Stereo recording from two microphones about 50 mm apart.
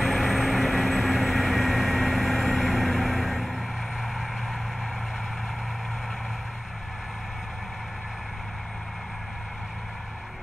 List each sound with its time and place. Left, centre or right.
0.0 s vehicle: centre